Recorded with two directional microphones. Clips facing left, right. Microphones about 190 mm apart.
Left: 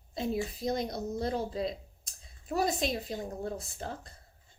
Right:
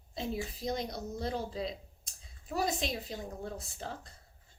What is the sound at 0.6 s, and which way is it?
A woman's voice, 45° left (ahead or behind).